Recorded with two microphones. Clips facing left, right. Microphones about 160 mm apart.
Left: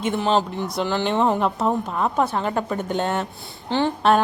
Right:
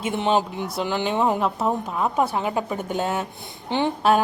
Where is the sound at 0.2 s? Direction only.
15° right (ahead or behind).